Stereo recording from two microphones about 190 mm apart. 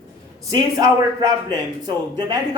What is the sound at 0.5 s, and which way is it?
Speech, 20° right (ahead or behind).